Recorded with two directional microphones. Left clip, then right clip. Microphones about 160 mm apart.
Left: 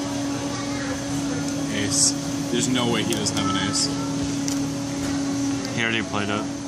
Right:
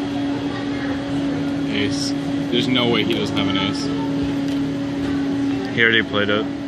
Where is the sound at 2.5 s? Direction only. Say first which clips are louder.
Right 5 dB; 15° left (ahead or behind).